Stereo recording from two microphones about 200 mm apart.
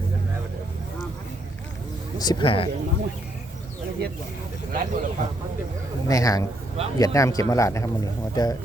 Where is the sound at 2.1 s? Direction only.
20° left (ahead or behind).